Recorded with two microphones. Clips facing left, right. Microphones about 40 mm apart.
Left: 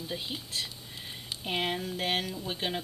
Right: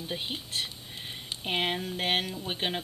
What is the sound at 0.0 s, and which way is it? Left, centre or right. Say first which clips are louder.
Speech: right 2 dB; right.